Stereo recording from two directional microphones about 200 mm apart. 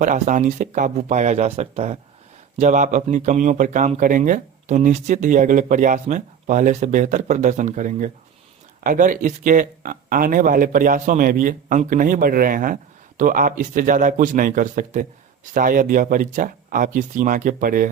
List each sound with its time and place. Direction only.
0.0 s speech: 40° right (ahead or behind)